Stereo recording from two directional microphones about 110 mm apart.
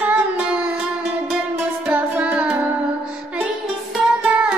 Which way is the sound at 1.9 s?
15° right (ahead or behind).